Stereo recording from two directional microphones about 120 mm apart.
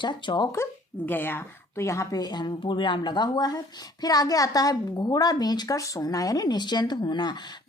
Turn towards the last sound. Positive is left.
turn(degrees=35)  # may be behind; listen again after turning